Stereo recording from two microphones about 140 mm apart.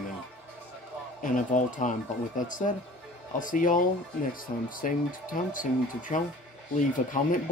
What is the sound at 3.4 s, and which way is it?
Speech, 70° left (ahead or behind).